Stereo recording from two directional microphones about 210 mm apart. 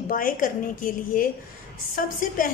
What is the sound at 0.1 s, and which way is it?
A woman's voice, 40° left (ahead or behind).